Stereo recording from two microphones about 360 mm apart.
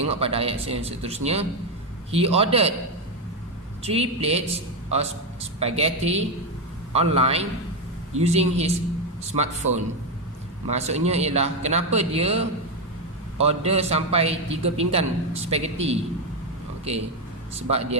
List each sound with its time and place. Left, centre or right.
0.0 s a man's voice: centre
3.8 s a man's voice: centre
10.7 s a man's voice: centre
17.5 s a man's voice: centre